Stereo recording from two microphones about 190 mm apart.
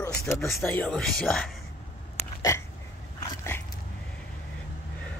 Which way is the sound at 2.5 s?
15° left (ahead or behind).